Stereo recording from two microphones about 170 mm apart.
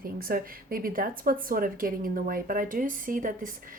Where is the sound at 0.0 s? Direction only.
60° right (ahead or behind).